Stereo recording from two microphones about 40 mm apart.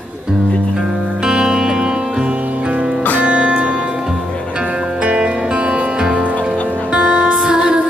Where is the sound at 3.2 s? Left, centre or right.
Right.